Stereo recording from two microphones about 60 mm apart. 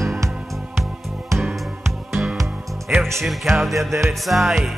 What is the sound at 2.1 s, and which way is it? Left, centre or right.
Music, centre.